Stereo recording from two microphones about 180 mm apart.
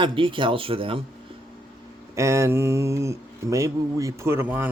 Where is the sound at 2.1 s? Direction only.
15° right (ahead or behind).